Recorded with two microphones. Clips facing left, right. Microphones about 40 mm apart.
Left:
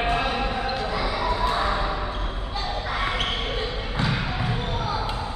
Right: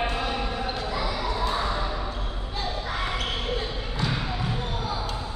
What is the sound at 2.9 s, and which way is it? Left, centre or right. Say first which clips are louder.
Basketball bounce: left 5 dB; left.